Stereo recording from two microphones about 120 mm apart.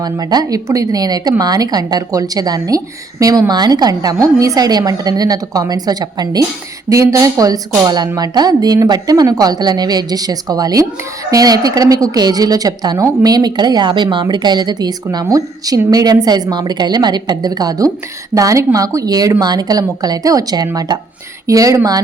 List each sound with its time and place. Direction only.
0.0 s a woman's voice: 35° right (ahead or behind)